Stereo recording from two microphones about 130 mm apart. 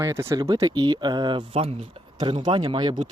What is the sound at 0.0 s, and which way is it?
Speech, 20° right (ahead or behind).